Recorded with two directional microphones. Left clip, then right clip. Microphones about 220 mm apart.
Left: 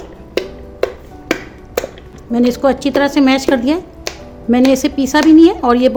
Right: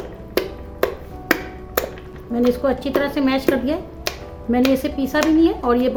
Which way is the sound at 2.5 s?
45° left (ahead or behind).